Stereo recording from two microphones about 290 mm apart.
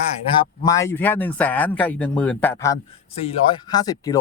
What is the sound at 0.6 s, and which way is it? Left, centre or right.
A man's voice, centre.